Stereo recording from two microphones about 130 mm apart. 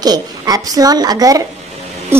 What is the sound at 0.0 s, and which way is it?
A woman's voice, 30° right (ahead or behind).